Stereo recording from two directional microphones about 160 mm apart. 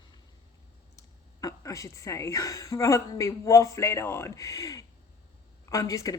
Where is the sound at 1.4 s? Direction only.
20° left (ahead or behind).